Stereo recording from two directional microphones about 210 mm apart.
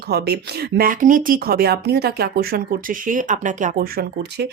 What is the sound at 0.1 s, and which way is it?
Speech, 50° right (ahead or behind).